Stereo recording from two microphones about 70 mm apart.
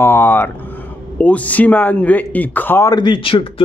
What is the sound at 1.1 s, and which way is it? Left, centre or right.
Speech, left.